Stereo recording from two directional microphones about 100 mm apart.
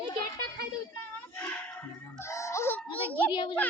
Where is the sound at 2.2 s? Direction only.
30° left (ahead or behind).